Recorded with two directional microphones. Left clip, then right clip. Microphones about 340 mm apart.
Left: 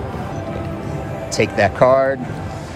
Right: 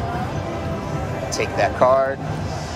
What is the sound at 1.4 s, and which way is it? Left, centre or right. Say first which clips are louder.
Speech: left 4 dB; left.